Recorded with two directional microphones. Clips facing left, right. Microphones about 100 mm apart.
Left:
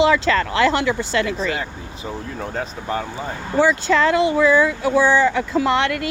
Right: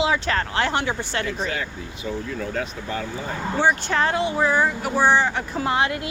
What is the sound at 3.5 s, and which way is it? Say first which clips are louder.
Speech: left 5 dB; 90° left.